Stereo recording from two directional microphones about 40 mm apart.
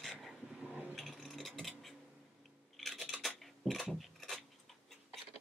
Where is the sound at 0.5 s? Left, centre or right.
Right.